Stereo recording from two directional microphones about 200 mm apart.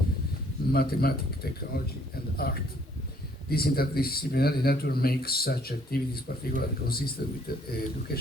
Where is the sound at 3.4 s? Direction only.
50° left (ahead or behind).